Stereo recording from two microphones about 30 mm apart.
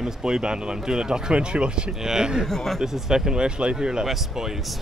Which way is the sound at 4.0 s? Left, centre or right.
Centre.